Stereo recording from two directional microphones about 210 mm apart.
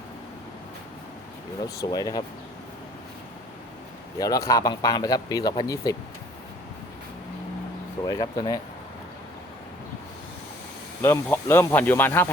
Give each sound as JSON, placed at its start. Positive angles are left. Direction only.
{"t": 1.6, "sound": "speech", "side_deg": 15}
{"t": 4.2, "sound": "speech", "side_deg": 15}
{"t": 8.0, "sound": "speech", "side_deg": 20}
{"t": 11.0, "sound": "speech", "side_deg": 10}